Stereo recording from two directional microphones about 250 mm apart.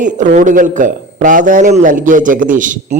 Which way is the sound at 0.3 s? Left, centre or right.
Right.